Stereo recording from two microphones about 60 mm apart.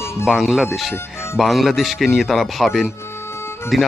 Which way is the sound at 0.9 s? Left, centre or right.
Left.